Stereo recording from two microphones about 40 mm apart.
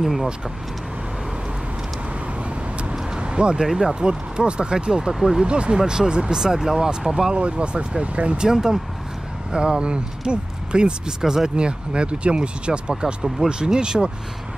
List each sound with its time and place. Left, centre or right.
0.0 s speech: centre
3.2 s vehicle: right
3.8 s speech: centre
7.3 s speech: right
8.4 s speech: centre
12.9 s speech: centre